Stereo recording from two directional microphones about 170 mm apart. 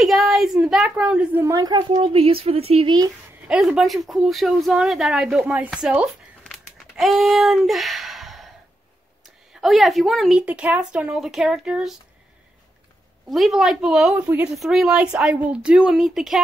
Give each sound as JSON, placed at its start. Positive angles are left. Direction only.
{"t": 0.0, "sound": "speech", "side_deg": 0}
{"t": 1.4, "sound": "speech", "side_deg": -20}
{"t": 3.4, "sound": "speech", "side_deg": -5}
{"t": 9.6, "sound": "speech", "side_deg": 0}
{"t": 13.3, "sound": "speech", "side_deg": 0}